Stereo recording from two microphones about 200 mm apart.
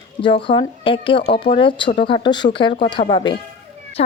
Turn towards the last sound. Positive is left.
turn(degrees=25)  # may be behind; listen again after turning